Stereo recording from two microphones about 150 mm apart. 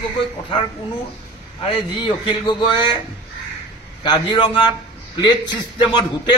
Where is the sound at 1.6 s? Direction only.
35° left (ahead or behind).